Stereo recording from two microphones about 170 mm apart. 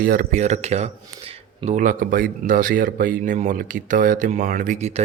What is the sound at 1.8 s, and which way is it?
Speech, 55° right (ahead or behind).